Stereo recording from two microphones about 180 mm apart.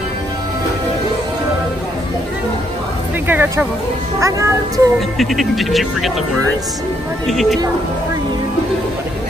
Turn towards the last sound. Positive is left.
turn(degrees=0)  # may be behind; listen again after turning